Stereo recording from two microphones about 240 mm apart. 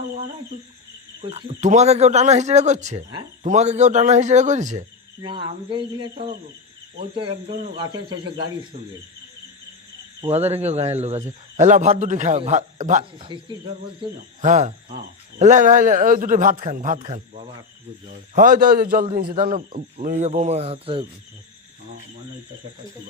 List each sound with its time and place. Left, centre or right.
1.2 s speech: right
10.2 s a man's voice: right
18.3 s a man's voice: right